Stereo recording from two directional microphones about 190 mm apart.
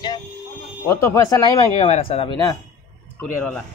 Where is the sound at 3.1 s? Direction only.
5° left (ahead or behind).